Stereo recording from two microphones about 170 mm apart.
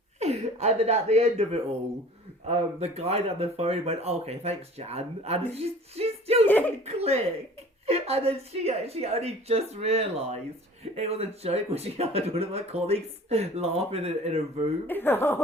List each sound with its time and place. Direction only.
0.2 s speech: 40° right (ahead or behind)
2.5 s speech: 40° right (ahead or behind)
6.4 s speech: 10° left (ahead or behind)
6.8 s speech: 35° right (ahead or behind)
14.8 s speech: 10° left (ahead or behind)